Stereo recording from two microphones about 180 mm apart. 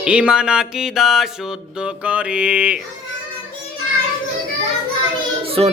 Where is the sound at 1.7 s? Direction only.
5° right (ahead or behind).